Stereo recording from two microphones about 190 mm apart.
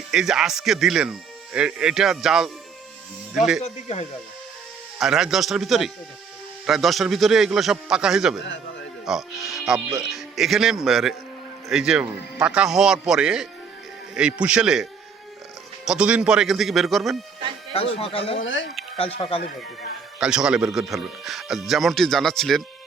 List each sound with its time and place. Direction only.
0.1 s speech: centre (ahead or behind)
3.6 s speech: 35° left (ahead or behind)
4.9 s speech: centre (ahead or behind)
18.0 s a man's voice: 30° left (ahead or behind)
18.4 s speech: 75° left (ahead or behind)
18.9 s speech: 30° left (ahead or behind)
20.1 s speech: 5° right (ahead or behind)